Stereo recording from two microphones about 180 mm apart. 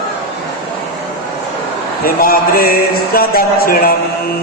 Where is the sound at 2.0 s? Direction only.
55° left (ahead or behind).